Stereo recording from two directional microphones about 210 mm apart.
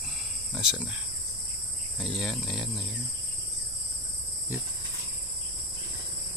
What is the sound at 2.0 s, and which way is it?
Speech, centre (ahead or behind).